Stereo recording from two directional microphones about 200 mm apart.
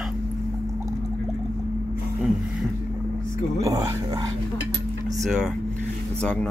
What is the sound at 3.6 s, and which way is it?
Dog, 15° right (ahead or behind).